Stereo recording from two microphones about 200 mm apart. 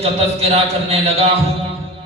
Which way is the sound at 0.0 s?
30° right (ahead or behind).